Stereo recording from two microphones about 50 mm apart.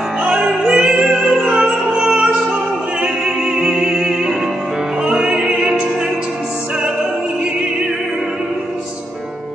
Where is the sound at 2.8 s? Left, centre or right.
Centre.